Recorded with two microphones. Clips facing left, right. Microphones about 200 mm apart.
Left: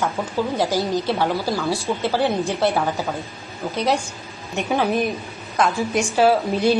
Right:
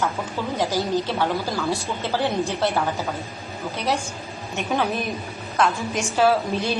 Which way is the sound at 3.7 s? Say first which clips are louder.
Left 4 dB; 15° left (ahead or behind).